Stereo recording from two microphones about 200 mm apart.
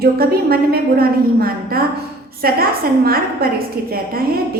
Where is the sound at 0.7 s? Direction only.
50° right (ahead or behind).